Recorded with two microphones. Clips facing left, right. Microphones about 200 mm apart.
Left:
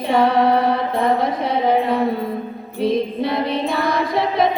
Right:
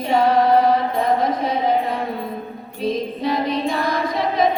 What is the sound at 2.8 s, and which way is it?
Music, 60° left (ahead or behind).